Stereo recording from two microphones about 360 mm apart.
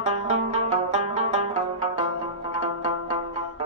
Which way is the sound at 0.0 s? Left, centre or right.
Centre.